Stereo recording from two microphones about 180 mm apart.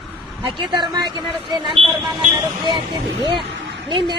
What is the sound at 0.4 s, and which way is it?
A man's voice, 25° right (ahead or behind).